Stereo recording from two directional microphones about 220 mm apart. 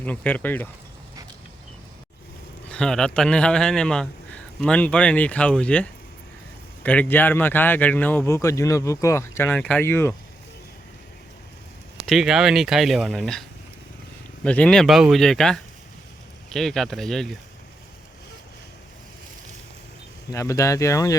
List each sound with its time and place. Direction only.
0.0 s speech: 5° left (ahead or behind)
2.6 s speech: 5° left (ahead or behind)
12.0 s speech: centre (ahead or behind)
14.4 s speech: 5° left (ahead or behind)
20.3 s speech: 15° left (ahead or behind)